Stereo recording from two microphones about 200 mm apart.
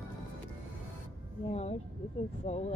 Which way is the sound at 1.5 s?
35° left (ahead or behind).